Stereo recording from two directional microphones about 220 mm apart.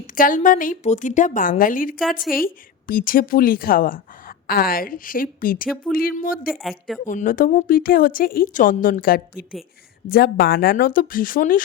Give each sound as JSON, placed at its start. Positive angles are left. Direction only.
{"t": 0.2, "sound": "a woman's voice", "side_deg": 35}
{"t": 6.5, "sound": "a woman's voice", "side_deg": 0}
{"t": 7.0, "sound": "a woman's voice", "side_deg": 35}